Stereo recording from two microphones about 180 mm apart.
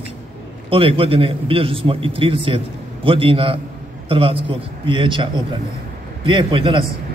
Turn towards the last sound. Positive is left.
turn(degrees=-30)  # may be behind; listen again after turning